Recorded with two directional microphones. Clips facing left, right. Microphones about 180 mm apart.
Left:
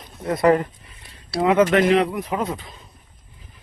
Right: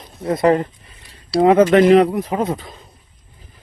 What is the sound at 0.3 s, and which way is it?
Speech, 30° right (ahead or behind).